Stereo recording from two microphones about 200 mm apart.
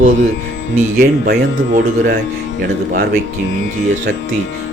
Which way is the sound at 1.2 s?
45° right (ahead or behind).